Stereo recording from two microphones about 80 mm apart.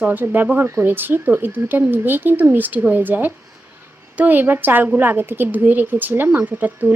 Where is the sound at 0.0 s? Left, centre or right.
Right.